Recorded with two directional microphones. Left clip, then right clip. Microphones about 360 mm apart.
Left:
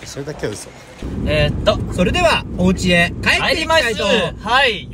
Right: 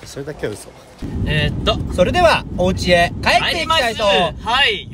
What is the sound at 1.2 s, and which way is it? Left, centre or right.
Speech, centre.